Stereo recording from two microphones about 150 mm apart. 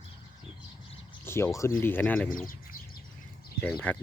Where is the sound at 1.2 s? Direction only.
15° left (ahead or behind).